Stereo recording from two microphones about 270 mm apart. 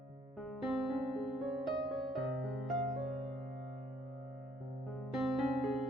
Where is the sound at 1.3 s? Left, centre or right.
Centre.